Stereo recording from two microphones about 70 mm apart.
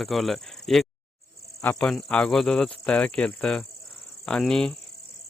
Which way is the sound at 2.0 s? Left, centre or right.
Centre.